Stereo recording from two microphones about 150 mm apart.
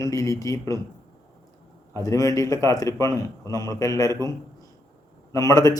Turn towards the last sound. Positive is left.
turn(degrees=20)  # may be behind; listen again after turning